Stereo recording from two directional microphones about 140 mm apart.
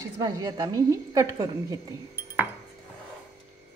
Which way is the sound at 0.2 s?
25° right (ahead or behind).